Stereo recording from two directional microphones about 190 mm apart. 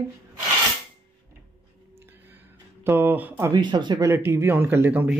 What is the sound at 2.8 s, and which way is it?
Speech, 10° right (ahead or behind).